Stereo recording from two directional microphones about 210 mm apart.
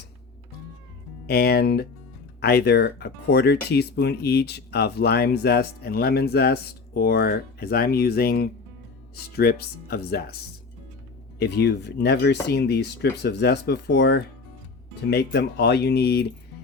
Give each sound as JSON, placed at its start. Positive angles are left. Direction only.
{"t": 1.3, "sound": "speech", "side_deg": 45}
{"t": 11.3, "sound": "speech", "side_deg": 50}